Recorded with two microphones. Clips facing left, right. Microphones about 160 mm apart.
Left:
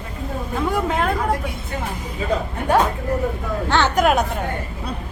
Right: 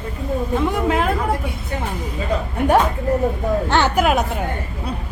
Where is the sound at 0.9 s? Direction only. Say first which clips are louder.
Right 2 dB; 5° right (ahead or behind).